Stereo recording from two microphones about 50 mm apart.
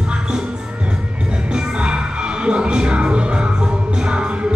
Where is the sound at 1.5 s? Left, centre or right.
Centre.